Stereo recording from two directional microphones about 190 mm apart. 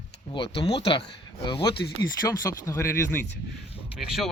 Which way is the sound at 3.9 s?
Centre (ahead or behind).